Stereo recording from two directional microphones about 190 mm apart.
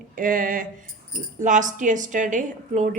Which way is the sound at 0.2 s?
45° right (ahead or behind).